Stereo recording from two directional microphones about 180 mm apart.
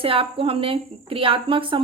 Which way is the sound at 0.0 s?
30° right (ahead or behind).